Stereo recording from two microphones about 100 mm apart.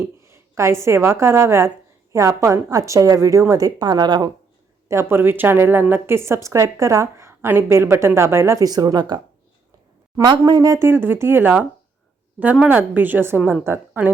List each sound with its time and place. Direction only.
0.0 s a woman's voice: 25° right (ahead or behind); by 4.3 s 45° right (ahead or behind)
4.9 s a woman's voice: 25° right (ahead or behind)
8.6 s a woman's voice: 40° right (ahead or behind)
10.2 s speech: 50° right (ahead or behind)
10.8 s a woman's voice: 25° right (ahead or behind)